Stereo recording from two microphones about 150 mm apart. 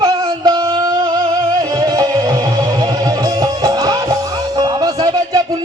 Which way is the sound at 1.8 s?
25° right (ahead or behind).